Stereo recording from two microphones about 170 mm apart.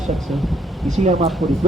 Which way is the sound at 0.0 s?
Centre (ahead or behind).